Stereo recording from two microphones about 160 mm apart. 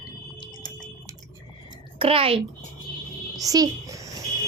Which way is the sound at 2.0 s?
35° right (ahead or behind).